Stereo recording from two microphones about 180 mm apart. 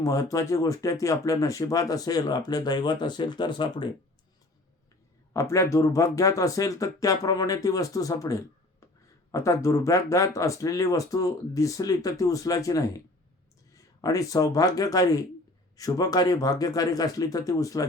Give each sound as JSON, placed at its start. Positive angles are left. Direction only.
{"t": 0.0, "sound": "speech", "side_deg": 15}
{"t": 5.3, "sound": "speech", "side_deg": 15}